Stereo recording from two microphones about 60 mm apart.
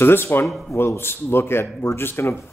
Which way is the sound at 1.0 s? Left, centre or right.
Left.